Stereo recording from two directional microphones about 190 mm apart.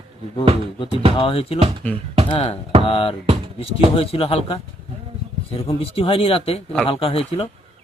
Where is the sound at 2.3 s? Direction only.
30° left (ahead or behind).